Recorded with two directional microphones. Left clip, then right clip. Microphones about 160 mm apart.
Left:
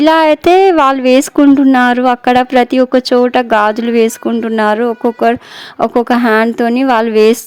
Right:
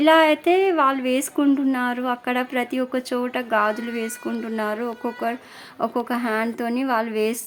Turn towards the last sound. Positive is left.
turn(degrees=50)  # may be behind; listen again after turning